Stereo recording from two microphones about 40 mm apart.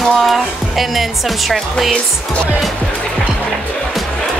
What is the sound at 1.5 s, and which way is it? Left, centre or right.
Speech, centre.